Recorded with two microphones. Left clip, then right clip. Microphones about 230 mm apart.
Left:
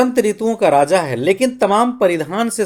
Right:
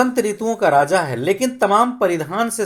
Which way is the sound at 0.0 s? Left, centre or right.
Left.